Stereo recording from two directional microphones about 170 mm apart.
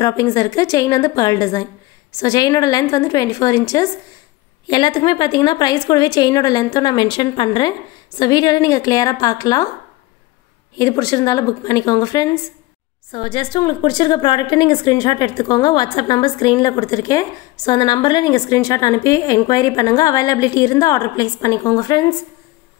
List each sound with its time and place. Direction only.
0.0 s a woman's voice: 20° left (ahead or behind)
10.8 s a woman's voice: 20° left (ahead or behind)